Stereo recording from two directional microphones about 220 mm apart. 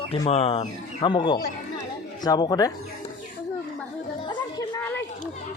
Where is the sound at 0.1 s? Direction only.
25° left (ahead or behind).